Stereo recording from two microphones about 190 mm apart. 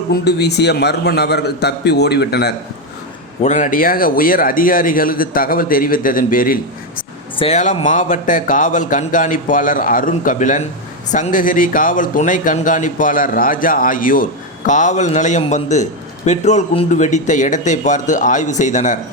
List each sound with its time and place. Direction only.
0.1 s a man's voice: 60° left (ahead or behind)
3.4 s speech: 40° left (ahead or behind)
7.3 s speech: 35° left (ahead or behind)